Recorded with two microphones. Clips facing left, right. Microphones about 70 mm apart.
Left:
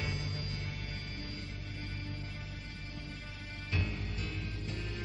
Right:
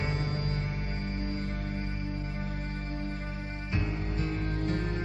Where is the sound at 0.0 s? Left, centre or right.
Right.